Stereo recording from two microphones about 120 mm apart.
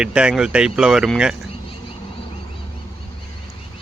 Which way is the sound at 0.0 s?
5° right (ahead or behind).